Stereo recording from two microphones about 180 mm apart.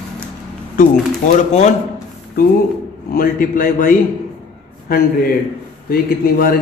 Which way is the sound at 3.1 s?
55° left (ahead or behind).